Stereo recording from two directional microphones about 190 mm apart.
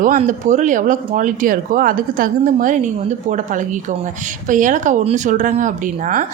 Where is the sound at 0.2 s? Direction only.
40° right (ahead or behind).